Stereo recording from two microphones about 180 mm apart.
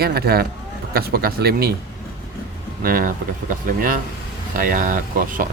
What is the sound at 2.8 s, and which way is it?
Speech, 50° right (ahead or behind).